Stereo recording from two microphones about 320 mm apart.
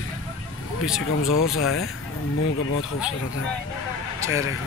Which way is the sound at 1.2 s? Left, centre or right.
Left.